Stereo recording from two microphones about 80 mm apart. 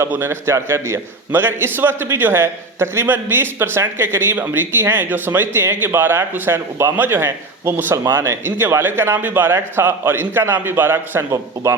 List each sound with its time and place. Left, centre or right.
0.1 s a man's voice: right